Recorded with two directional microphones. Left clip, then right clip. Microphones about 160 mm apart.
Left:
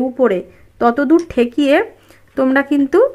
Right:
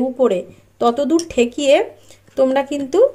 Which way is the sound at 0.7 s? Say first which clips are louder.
Left 3 dB; 60° left (ahead or behind).